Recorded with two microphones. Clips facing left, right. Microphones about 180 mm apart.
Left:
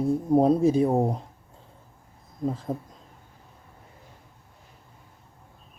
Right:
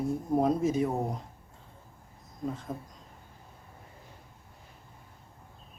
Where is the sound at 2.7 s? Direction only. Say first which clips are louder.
Left 7 dB; 30° left (ahead or behind).